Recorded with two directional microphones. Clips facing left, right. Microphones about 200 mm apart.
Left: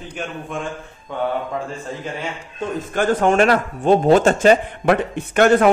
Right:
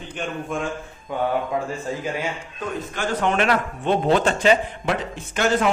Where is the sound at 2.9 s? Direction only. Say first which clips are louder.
Left 7 dB; 50° left (ahead or behind).